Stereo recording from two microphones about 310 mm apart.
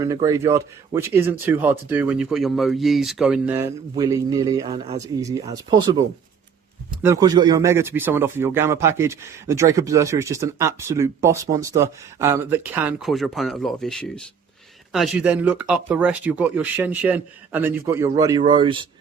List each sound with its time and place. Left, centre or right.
0.0 s speech: centre